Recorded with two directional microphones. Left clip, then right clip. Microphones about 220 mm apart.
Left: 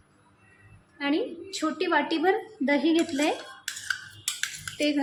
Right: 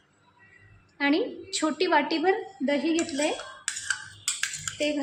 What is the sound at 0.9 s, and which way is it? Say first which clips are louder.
A woman's voice: right 3 dB; 10° right (ahead or behind).